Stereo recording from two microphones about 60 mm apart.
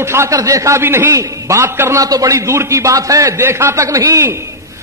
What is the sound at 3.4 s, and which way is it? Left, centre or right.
Speech, right.